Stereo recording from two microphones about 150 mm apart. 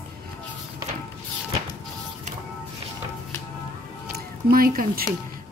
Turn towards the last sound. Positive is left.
turn(degrees=-80)